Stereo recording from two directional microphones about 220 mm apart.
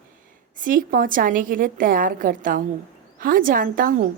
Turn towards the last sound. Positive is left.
turn(degrees=-40)  # may be behind; listen again after turning